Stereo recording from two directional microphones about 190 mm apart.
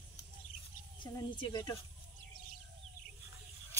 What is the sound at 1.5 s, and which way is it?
Speech, 20° left (ahead or behind).